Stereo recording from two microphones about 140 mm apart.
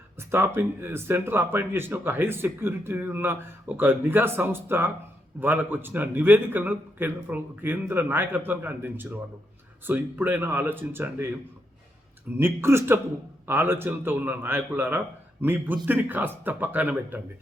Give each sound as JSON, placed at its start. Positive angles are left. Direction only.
{"t": 0.2, "sound": "speech", "side_deg": -15}
{"t": 12.4, "sound": "speech", "side_deg": -15}